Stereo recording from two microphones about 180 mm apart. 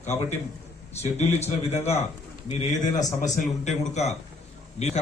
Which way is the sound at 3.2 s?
45° left (ahead or behind).